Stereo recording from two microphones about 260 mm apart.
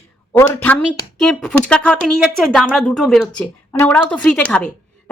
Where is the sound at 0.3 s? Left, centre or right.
Centre.